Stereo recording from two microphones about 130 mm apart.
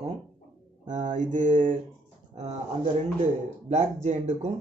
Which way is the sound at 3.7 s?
60° right (ahead or behind).